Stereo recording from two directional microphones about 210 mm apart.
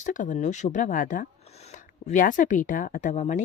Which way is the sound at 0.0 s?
35° left (ahead or behind).